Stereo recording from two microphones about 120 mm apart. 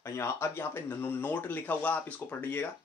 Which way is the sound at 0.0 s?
25° left (ahead or behind).